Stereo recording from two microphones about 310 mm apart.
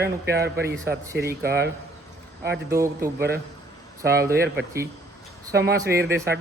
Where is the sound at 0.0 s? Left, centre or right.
Right.